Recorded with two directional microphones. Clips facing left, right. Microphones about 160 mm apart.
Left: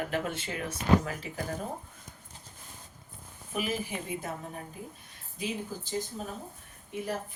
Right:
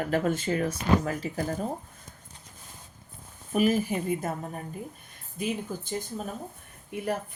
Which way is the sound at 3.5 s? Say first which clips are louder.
Right 9 dB; 45° right (ahead or behind).